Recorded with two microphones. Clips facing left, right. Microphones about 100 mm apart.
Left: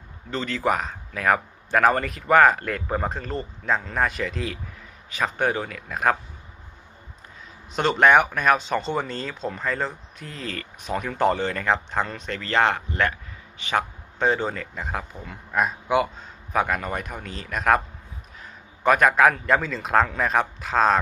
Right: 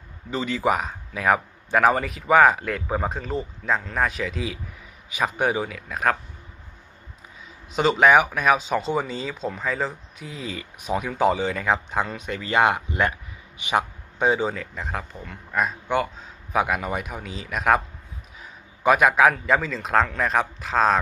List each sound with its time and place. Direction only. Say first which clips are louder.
0.3 s speech: right 1 dB; 5° right (ahead or behind)
7.7 s speech: right 1 dB; centre (ahead or behind)